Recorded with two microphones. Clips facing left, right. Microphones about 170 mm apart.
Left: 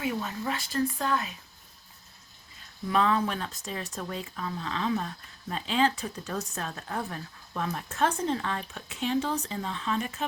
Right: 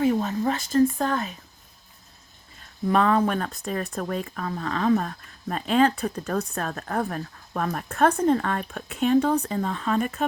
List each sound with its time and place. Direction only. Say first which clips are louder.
0.0 s speech: right 9 dB; 40° right (ahead or behind)
2.8 s speech: right 5 dB; 50° right (ahead or behind)